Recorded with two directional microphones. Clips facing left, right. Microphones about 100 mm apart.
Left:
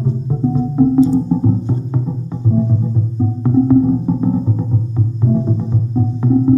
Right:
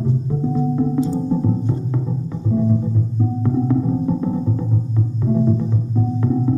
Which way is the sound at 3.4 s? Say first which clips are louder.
Left 8 dB; 20° left (ahead or behind).